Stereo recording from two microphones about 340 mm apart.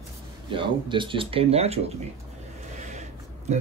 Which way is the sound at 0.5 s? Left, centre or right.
Centre.